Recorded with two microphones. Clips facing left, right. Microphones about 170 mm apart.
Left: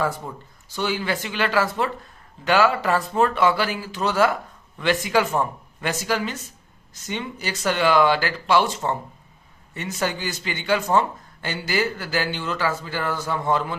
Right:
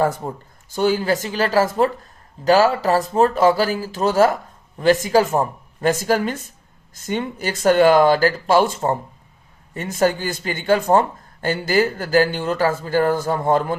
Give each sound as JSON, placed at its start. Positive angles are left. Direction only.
{"t": 0.0, "sound": "speech", "side_deg": -50}